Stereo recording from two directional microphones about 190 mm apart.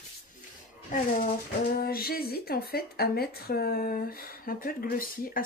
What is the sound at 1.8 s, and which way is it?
Speech, 50° left (ahead or behind).